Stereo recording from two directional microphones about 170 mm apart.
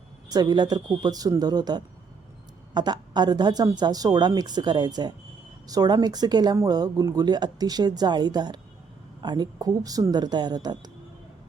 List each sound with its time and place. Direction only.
0.3 s speech: 25° right (ahead or behind)